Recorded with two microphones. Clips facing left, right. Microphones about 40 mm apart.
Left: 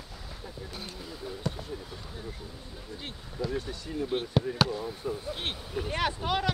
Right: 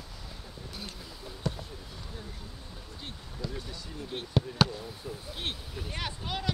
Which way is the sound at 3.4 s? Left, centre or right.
Left.